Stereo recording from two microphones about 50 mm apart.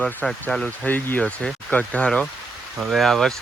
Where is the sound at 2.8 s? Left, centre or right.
Centre.